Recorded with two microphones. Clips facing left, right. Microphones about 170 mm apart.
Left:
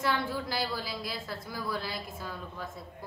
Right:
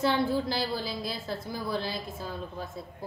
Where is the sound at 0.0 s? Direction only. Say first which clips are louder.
Right 5 dB; 30° right (ahead or behind).